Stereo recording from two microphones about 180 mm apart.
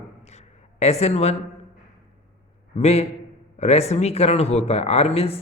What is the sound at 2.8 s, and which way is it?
A man's voice, 35° left (ahead or behind).